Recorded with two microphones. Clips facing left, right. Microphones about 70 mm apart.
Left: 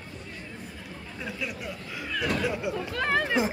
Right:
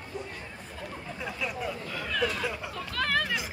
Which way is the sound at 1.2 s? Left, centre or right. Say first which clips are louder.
Right 1 dB; centre.